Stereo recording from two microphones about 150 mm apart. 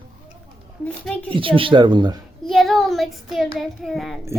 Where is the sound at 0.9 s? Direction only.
5° left (ahead or behind).